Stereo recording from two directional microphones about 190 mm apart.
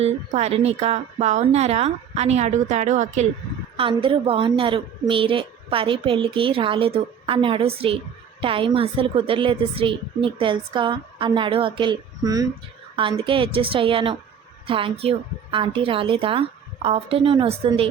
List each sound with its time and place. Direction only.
0.0 s a woman's voice: 35° right (ahead or behind)